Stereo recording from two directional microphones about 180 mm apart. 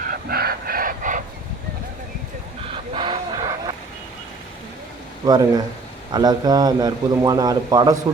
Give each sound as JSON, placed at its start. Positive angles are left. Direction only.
{"t": 0.0, "sound": "a sound", "side_deg": -55}
{"t": 2.9, "sound": "vehicle", "side_deg": -25}
{"t": 5.2, "sound": "a man's voice", "side_deg": -20}